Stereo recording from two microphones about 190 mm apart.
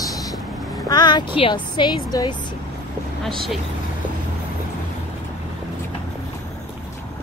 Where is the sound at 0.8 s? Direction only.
20° left (ahead or behind).